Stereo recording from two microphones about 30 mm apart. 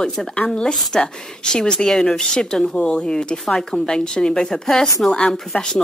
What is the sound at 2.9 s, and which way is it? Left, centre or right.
Speech, left.